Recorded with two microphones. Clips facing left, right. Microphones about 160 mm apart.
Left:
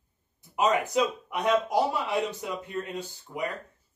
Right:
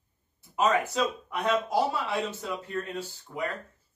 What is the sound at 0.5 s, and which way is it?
Speech, 15° left (ahead or behind).